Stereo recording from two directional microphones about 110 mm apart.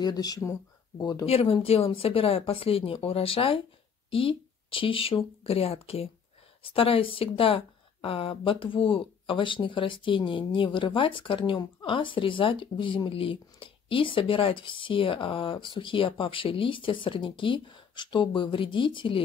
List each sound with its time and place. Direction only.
0.0 s speech: 35° left (ahead or behind)
1.2 s speech: 60° left (ahead or behind)